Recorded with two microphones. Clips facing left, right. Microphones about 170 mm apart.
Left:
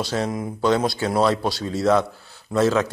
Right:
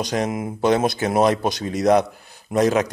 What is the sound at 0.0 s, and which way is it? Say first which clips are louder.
A man's voice: right 1 dB; 15° right (ahead or behind).